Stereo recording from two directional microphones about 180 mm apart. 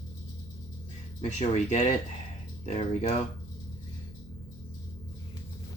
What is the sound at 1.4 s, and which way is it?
Speech, 40° left (ahead or behind).